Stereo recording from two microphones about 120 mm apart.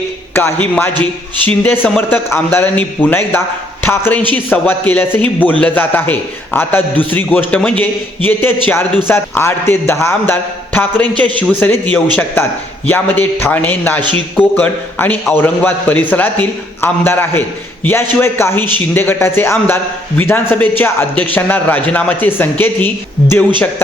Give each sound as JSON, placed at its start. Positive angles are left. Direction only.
{"t": 0.3, "sound": "a man's voice", "side_deg": 15}